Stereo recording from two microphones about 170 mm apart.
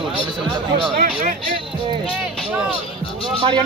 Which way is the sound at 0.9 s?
55° right (ahead or behind).